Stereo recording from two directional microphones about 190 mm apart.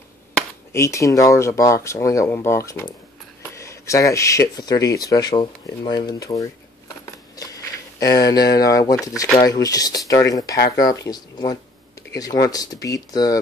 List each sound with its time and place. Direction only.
0.7 s speech: 15° left (ahead or behind)
8.0 s speech: 20° left (ahead or behind)